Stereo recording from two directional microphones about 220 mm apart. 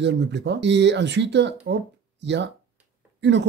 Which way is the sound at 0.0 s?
50° right (ahead or behind).